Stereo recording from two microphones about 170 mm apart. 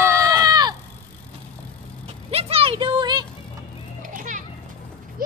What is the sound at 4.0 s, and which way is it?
Children playing, 50° right (ahead or behind).